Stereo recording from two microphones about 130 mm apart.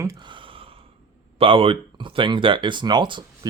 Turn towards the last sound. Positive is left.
turn(degrees=-35)  # may be behind; listen again after turning